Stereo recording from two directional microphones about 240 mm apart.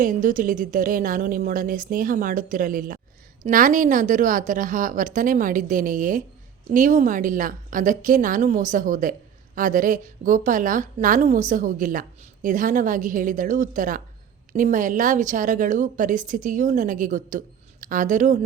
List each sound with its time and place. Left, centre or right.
0.0 s a woman's voice: right